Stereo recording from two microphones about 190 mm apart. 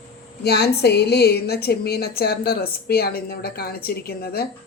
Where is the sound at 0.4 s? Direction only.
60° left (ahead or behind).